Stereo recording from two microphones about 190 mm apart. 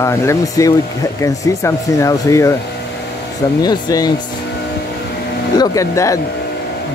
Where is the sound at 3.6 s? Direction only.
20° left (ahead or behind).